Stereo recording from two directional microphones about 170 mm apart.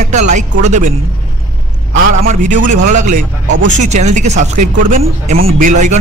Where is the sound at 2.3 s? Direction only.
45° right (ahead or behind).